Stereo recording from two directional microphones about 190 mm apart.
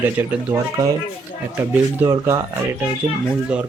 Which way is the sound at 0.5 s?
20° right (ahead or behind).